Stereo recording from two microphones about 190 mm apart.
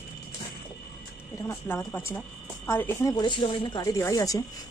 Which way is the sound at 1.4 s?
10° left (ahead or behind).